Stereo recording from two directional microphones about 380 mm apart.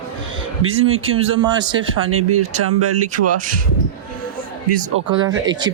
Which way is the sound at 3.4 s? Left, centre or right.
Right.